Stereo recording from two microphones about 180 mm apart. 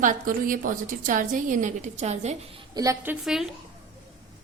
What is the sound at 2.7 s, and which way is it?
Speech, 20° right (ahead or behind).